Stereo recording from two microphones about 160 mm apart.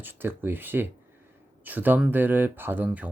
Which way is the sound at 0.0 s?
10° right (ahead or behind).